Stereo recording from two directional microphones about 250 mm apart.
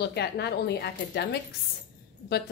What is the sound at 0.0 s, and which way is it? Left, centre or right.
A woman's voice, left.